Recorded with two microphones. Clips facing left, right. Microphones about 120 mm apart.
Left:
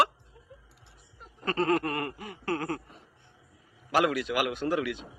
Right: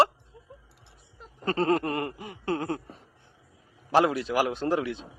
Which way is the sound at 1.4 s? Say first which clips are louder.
Right 2 dB; 30° right (ahead or behind).